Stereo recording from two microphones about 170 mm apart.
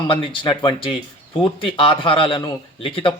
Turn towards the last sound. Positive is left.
turn(degrees=30)  # may be behind; listen again after turning